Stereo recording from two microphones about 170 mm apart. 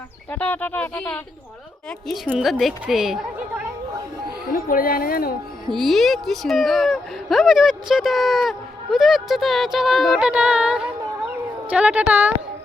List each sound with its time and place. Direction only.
0.3 s a woman's voice: 10° left (ahead or behind); by 3.7 s 5° right (ahead or behind)
4.5 s a woman's voice: 60° left (ahead or behind)
5.7 s a woman's voice: centre (ahead or behind)